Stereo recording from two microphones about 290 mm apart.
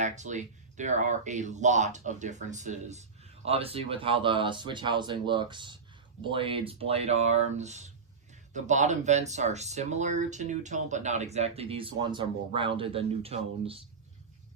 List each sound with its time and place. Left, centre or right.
0.0 s speech: right